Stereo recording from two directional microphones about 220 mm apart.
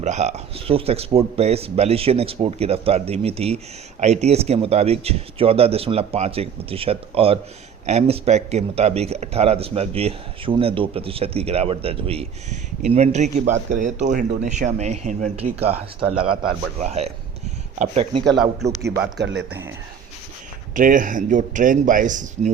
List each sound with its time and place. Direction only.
0.0 s speech: 30° right (ahead or behind)
18.8 s speech: 50° right (ahead or behind)
19.5 s speech: 10° right (ahead or behind)
20.7 s speech: 35° right (ahead or behind)